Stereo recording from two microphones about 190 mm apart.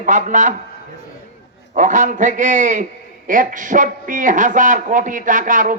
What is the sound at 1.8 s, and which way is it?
A man's voice, 40° right (ahead or behind).